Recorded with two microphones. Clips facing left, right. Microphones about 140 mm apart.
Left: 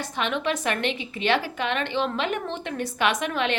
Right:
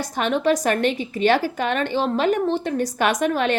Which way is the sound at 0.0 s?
40° right (ahead or behind).